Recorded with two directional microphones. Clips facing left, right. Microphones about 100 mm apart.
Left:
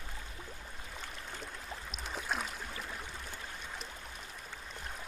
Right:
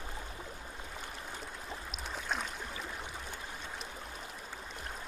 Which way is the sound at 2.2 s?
Centre (ahead or behind).